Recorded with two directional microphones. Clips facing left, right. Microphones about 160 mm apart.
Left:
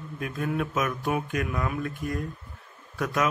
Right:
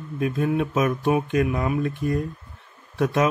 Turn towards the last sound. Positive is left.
turn(degrees=-25)  # may be behind; listen again after turning